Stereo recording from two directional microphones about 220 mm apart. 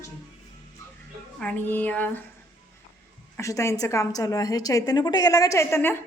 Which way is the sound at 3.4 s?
15° left (ahead or behind).